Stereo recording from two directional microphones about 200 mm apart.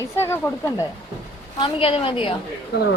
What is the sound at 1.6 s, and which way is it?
Speech, 25° left (ahead or behind).